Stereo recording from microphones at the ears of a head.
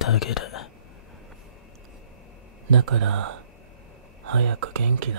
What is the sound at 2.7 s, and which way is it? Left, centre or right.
Speech, right.